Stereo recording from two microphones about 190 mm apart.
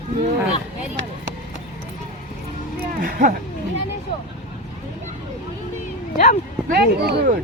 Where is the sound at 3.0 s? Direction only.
45° right (ahead or behind).